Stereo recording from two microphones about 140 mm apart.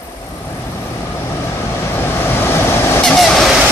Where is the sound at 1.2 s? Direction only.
20° left (ahead or behind).